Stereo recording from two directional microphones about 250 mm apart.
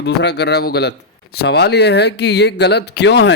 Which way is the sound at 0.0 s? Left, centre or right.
Left.